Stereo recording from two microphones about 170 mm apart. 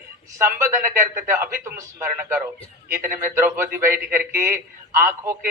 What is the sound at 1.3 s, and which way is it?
A man's voice, 15° right (ahead or behind).